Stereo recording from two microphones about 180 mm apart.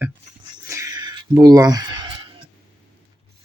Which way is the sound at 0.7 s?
15° right (ahead or behind).